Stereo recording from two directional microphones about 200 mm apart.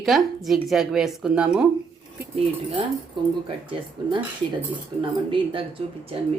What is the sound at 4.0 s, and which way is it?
Speech, 20° right (ahead or behind).